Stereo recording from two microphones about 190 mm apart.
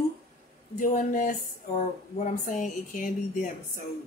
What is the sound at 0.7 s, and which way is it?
A woman's voice, 45° left (ahead or behind).